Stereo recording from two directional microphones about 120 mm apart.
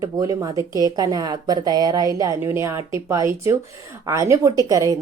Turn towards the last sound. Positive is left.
turn(degrees=-30)  # may be behind; listen again after turning